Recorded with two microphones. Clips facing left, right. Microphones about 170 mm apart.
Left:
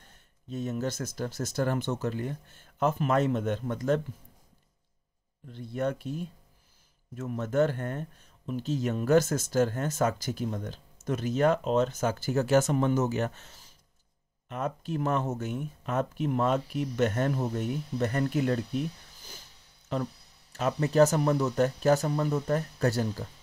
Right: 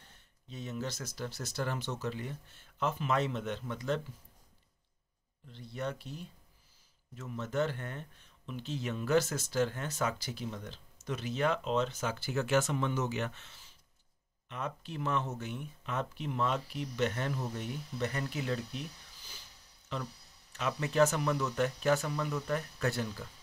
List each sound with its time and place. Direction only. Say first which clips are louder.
0.0 s speech: left 5 dB; 45° left (ahead or behind)
5.5 s speech: left 8 dB; 50° left (ahead or behind)
20.5 s speech: left 6 dB; 40° left (ahead or behind)